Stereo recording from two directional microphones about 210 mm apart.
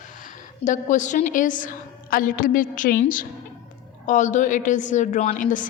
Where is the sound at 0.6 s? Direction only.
35° left (ahead or behind).